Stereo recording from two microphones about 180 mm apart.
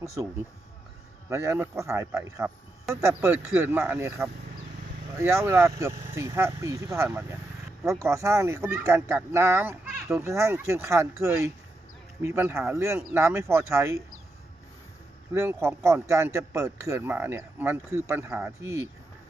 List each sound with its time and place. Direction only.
0.0 s speech: 15° right (ahead or behind)
1.3 s speech: 15° right (ahead or behind)
15.3 s speech: 15° right (ahead or behind)